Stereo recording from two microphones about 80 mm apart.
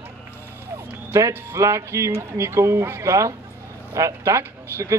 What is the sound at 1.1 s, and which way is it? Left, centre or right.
A man's voice, right.